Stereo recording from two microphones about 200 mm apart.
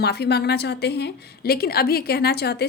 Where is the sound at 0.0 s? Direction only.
55° left (ahead or behind).